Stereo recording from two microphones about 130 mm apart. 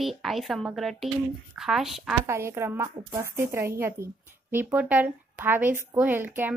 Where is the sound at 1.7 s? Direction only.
Centre (ahead or behind).